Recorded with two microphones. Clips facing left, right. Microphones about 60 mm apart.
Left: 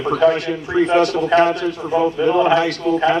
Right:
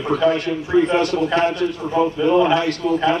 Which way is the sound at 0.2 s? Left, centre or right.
Left.